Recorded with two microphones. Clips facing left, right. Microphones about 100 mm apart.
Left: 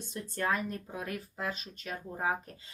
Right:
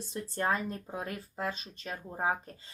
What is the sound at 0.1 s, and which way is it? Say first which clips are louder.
Speech: right 1 dB; 30° right (ahead or behind).